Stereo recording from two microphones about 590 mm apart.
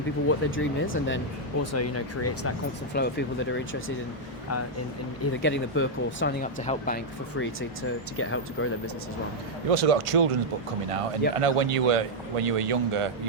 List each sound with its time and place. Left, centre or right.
0.3 s speech: centre
5.2 s speech: centre
9.6 s a man's voice: right
11.3 s a man's voice: right